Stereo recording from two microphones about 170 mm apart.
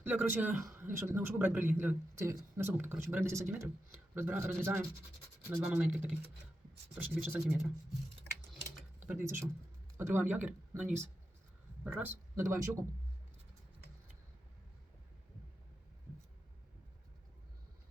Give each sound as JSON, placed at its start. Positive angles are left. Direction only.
{"t": 0.0, "sound": "a man's voice", "side_deg": -10}
{"t": 9.0, "sound": "a man's voice", "side_deg": -10}